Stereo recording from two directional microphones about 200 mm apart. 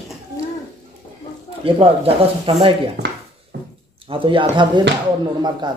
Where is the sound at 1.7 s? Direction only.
30° right (ahead or behind).